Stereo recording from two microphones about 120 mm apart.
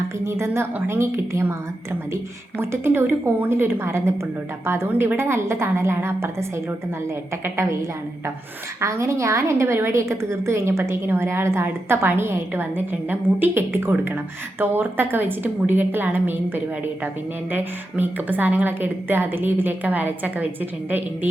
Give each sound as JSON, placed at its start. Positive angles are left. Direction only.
{"t": 0.3, "sound": "a woman's voice", "side_deg": -25}
{"t": 7.4, "sound": "a woman's voice", "side_deg": -25}
{"t": 17.5, "sound": "a woman's voice", "side_deg": -15}